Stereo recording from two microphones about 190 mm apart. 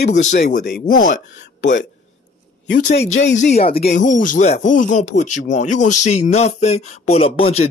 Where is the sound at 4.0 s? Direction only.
40° left (ahead or behind).